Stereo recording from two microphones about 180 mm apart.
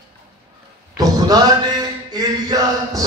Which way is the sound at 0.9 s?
20° right (ahead or behind).